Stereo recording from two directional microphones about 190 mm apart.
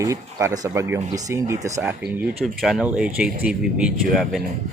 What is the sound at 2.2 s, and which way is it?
Speech, centre (ahead or behind).